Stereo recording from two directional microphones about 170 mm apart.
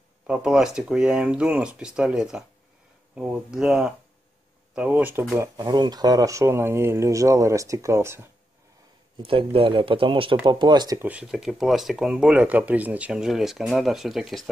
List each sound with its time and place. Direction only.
0.3 s speech: 5° right (ahead or behind)
9.2 s speech: 35° right (ahead or behind)
11.0 s speech: 10° right (ahead or behind)